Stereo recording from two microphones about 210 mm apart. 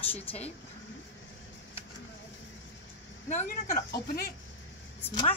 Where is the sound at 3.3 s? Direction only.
35° left (ahead or behind).